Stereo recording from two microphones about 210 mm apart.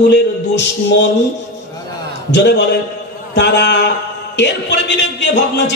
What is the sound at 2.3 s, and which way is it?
A man's voice, 55° left (ahead or behind).